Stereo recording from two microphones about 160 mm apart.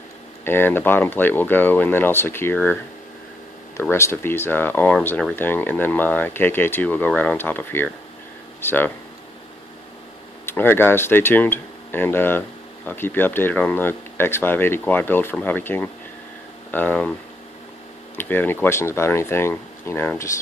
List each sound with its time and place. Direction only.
0.4 s speech: 15° left (ahead or behind)
3.9 s speech: 15° left (ahead or behind)
10.4 s speech: 15° left (ahead or behind)
18.1 s speech: 10° left (ahead or behind)